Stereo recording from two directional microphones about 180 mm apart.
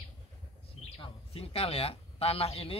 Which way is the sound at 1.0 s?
35° left (ahead or behind).